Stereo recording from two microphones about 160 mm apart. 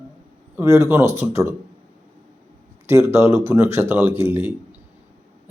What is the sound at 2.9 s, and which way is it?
Speech, 15° right (ahead or behind).